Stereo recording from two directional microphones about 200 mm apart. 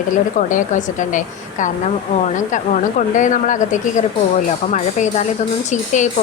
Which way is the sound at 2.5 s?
40° left (ahead or behind).